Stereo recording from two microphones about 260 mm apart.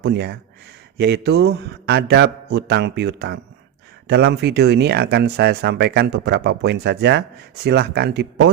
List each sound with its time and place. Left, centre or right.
0.0 s speech: right